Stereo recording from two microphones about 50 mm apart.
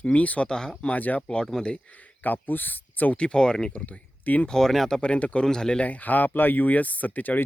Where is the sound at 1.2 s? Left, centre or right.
Centre.